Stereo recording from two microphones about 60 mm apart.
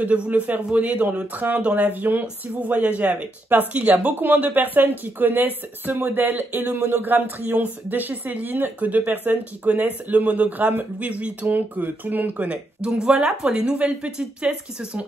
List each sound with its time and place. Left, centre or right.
0.0 s speech: right
1.9 s speech: right
12.8 s speech: centre